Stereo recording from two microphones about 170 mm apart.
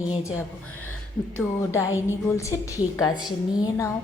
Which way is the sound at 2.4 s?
20° left (ahead or behind).